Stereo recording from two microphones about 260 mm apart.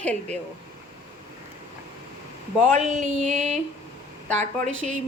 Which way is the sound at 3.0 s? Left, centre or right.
Right.